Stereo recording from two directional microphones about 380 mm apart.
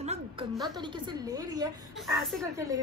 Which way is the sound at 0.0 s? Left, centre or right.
Centre.